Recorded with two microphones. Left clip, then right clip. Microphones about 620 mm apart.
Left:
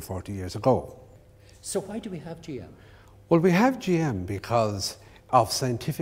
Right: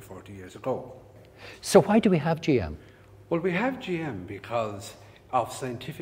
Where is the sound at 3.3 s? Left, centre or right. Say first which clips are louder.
Left 6 dB; left.